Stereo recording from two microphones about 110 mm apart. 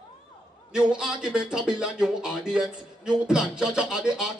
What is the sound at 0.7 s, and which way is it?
Speech, 5° right (ahead or behind).